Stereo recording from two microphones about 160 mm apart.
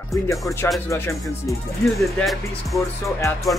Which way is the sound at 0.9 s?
20° left (ahead or behind).